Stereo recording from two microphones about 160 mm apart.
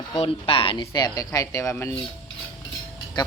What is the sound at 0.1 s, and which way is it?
Speech, 35° left (ahead or behind).